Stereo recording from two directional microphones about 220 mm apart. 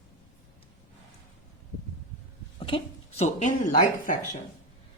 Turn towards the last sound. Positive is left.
turn(degrees=35)  # may be behind; listen again after turning